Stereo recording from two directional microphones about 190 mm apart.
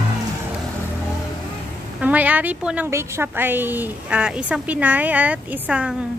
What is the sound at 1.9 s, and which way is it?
A woman's voice, 10° right (ahead or behind).